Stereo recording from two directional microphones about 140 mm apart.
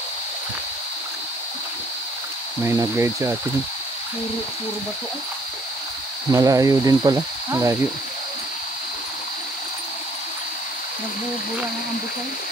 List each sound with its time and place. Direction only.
2.6 s speech: 20° right (ahead or behind)
6.3 s speech: 25° right (ahead or behind)